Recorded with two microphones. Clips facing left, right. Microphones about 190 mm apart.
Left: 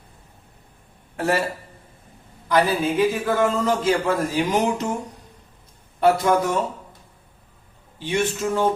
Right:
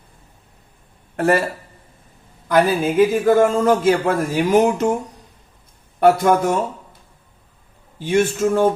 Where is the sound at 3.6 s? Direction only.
55° right (ahead or behind).